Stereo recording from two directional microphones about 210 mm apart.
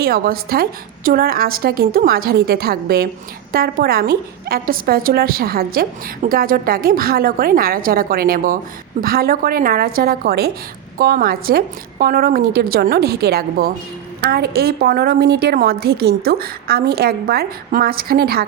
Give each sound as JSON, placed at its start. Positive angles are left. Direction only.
{"t": 0.0, "sound": "a woman's voice", "side_deg": -45}